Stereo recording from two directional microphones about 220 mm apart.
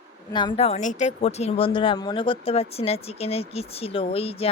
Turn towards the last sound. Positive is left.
turn(degrees=25)  # may be behind; listen again after turning